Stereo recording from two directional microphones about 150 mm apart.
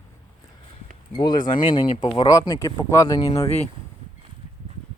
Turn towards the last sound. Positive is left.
turn(degrees=45)  # may be behind; listen again after turning